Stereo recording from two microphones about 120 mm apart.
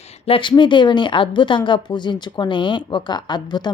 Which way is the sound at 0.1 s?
50° left (ahead or behind).